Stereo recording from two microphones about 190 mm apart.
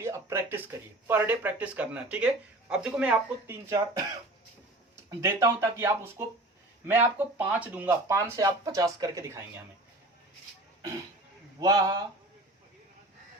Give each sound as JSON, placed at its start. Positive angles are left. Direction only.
{"t": 0.0, "sound": "speech", "side_deg": -15}
{"t": 5.2, "sound": "speech", "side_deg": -15}
{"t": 11.6, "sound": "speech", "side_deg": -20}